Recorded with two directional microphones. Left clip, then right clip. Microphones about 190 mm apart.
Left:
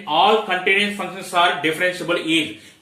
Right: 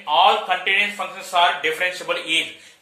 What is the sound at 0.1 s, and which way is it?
Speech, 20° right (ahead or behind).